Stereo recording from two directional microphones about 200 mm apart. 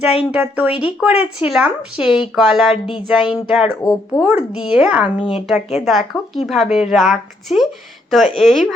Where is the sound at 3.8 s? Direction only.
20° left (ahead or behind).